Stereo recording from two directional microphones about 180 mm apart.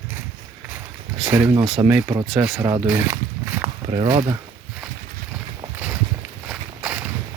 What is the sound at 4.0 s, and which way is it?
Speech, 25° right (ahead or behind).